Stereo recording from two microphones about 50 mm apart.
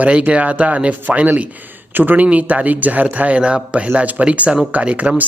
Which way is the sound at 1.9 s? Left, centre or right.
Right.